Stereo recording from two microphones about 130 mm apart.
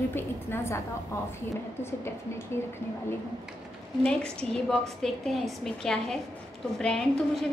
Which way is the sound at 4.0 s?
5° left (ahead or behind).